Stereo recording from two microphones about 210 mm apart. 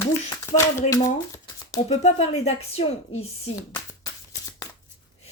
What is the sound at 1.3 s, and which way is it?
Shuffling cards, 15° left (ahead or behind).